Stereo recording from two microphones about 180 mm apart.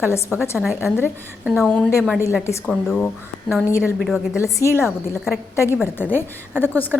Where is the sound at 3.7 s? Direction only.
15° left (ahead or behind).